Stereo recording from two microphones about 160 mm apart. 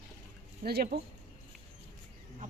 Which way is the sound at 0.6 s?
70° right (ahead or behind).